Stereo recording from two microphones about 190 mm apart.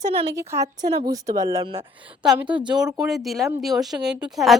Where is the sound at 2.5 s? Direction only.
25° right (ahead or behind).